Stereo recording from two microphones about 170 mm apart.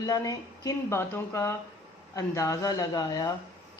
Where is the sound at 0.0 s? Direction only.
20° left (ahead or behind).